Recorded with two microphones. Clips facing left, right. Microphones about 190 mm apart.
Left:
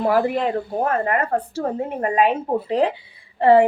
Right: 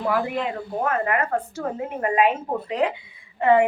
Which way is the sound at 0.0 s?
40° left (ahead or behind).